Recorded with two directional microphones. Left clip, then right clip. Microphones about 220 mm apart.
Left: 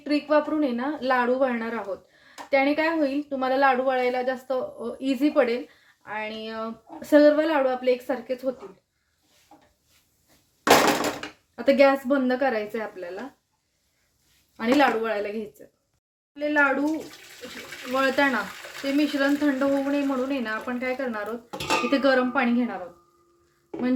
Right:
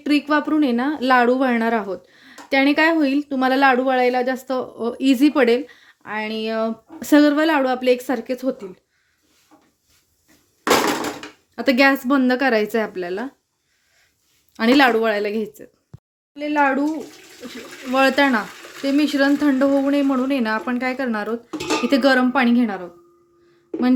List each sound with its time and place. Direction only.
0.0 s speech: 50° right (ahead or behind)
11.5 s speech: 40° right (ahead or behind)
14.5 s speech: 50° right (ahead or behind)
17.9 s speech: 45° right (ahead or behind)